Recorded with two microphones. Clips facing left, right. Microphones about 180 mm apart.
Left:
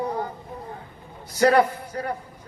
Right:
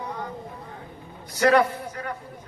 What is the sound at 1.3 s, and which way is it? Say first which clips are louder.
Speech: left 1 dB; 35° left (ahead or behind).